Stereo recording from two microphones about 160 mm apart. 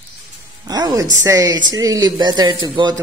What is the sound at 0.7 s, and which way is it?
A woman's voice, 25° right (ahead or behind).